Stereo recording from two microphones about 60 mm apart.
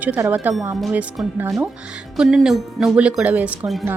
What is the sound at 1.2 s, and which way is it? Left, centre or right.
Speech, centre.